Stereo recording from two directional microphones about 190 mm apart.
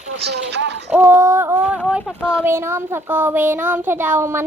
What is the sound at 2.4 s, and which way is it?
Speech, 15° right (ahead or behind).